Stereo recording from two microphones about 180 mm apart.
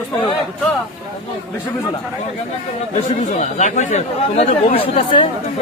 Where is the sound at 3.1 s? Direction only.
40° left (ahead or behind).